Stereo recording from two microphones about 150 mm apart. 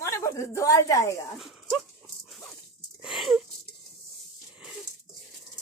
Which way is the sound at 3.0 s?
Centre (ahead or behind).